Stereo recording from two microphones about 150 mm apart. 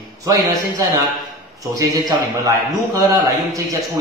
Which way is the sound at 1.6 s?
25° right (ahead or behind).